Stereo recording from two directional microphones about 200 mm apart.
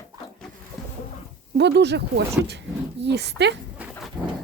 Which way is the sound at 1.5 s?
60° right (ahead or behind).